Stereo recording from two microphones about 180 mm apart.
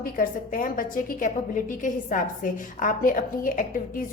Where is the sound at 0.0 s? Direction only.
50° left (ahead or behind).